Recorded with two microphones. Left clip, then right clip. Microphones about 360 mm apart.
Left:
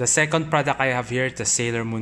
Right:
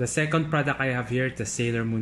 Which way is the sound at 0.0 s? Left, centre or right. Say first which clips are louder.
Left 5 dB; centre.